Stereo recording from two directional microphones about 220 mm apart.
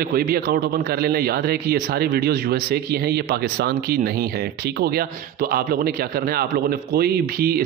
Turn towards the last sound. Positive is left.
turn(degrees=-45)  # may be behind; listen again after turning